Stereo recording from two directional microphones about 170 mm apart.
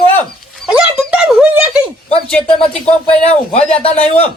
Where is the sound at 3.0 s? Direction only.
35° left (ahead or behind).